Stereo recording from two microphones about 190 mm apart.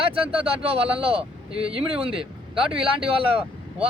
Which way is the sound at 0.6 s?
30° right (ahead or behind).